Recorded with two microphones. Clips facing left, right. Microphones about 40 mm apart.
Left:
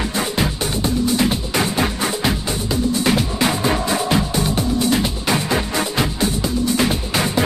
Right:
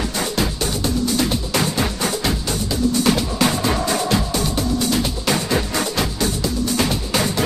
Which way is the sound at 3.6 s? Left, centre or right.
Centre.